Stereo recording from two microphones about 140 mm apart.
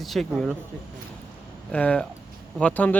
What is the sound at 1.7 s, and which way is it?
Speech, 10° left (ahead or behind).